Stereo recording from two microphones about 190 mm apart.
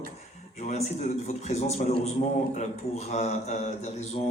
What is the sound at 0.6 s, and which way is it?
A man's voice, 35° left (ahead or behind).